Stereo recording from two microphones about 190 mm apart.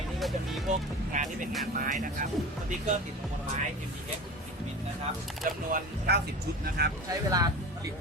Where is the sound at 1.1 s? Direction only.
40° right (ahead or behind).